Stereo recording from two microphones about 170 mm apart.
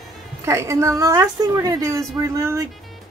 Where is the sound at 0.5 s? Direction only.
15° right (ahead or behind).